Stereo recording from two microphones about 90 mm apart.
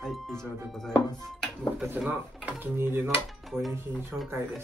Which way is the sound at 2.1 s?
20° right (ahead or behind).